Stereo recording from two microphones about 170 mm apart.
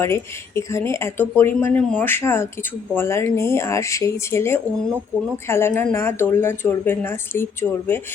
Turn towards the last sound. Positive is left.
turn(degrees=15)  # may be behind; listen again after turning